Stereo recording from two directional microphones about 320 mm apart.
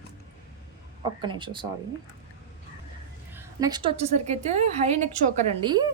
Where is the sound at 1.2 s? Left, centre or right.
Centre.